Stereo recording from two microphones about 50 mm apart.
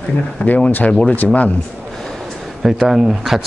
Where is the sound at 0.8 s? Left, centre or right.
Left.